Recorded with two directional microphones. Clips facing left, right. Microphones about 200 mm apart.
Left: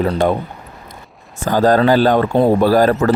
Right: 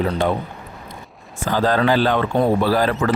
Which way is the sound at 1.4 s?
40° left (ahead or behind).